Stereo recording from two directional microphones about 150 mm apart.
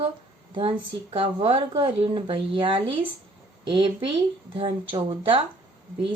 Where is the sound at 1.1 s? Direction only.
35° right (ahead or behind).